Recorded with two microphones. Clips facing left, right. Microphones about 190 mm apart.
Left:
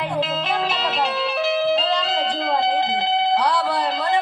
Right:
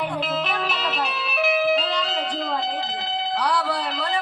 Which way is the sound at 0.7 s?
90° left.